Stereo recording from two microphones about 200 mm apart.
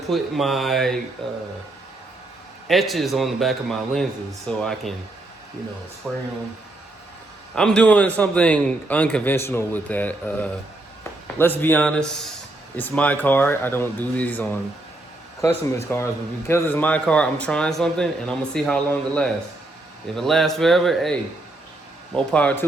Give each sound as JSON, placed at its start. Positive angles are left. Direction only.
{"t": 0.1, "sound": "a man's voice", "side_deg": 0}
{"t": 2.6, "sound": "a man's voice", "side_deg": 0}
{"t": 6.0, "sound": "speech", "side_deg": -5}
{"t": 7.5, "sound": "a man's voice", "side_deg": 5}